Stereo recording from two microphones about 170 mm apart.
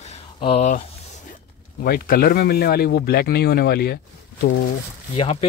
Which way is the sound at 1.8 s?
65° left (ahead or behind).